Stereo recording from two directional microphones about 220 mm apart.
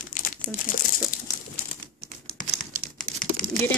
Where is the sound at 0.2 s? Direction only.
35° left (ahead or behind).